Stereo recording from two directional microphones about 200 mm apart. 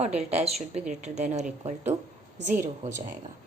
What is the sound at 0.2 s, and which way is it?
A woman's voice, 30° right (ahead or behind).